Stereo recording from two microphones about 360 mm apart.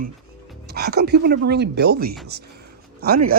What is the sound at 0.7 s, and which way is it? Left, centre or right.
Speech, right.